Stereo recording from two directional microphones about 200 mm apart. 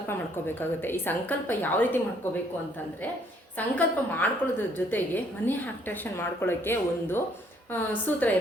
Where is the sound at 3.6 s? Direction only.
10° left (ahead or behind).